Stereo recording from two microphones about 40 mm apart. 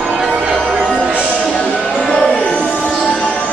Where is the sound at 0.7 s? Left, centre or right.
Centre.